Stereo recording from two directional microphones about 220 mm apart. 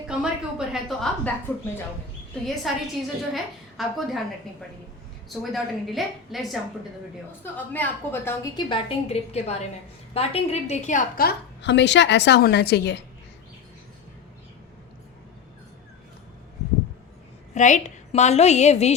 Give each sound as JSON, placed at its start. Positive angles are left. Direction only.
{"t": 0.1, "sound": "a woman's voice", "side_deg": -5}
{"t": 2.7, "sound": "a woman's voice", "side_deg": 0}
{"t": 5.3, "sound": "a woman's voice", "side_deg": 0}
{"t": 8.7, "sound": "a woman's voice", "side_deg": 30}
{"t": 17.5, "sound": "a woman's voice", "side_deg": 35}